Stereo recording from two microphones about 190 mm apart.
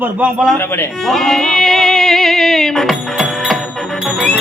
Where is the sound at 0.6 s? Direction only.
10° left (ahead or behind).